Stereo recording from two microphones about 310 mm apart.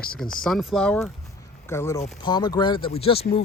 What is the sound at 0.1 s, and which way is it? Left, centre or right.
Speech, centre.